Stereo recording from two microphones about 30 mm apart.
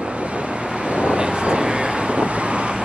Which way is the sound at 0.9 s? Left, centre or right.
Right.